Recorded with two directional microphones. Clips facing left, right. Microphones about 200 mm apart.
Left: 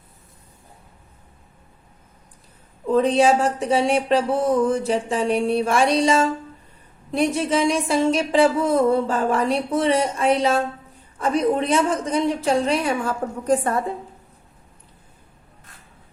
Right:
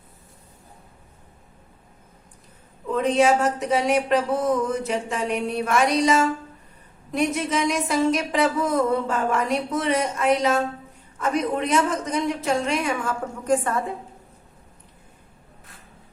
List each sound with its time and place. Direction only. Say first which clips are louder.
2.8 s a woman's voice: left 3 dB; 35° left (ahead or behind)